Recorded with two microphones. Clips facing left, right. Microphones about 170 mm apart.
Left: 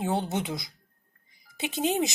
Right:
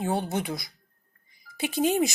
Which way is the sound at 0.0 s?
20° left (ahead or behind).